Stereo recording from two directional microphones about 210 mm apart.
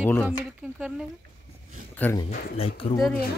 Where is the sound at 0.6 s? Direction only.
5° right (ahead or behind).